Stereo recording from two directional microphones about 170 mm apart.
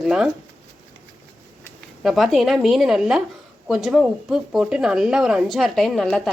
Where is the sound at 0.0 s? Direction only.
5° right (ahead or behind).